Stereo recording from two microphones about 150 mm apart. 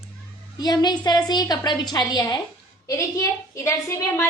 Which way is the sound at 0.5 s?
25° left (ahead or behind).